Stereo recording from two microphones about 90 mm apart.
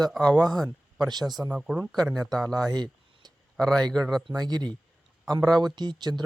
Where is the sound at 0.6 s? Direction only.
40° right (ahead or behind).